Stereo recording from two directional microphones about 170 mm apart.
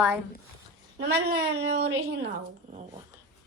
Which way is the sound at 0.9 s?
75° right (ahead or behind).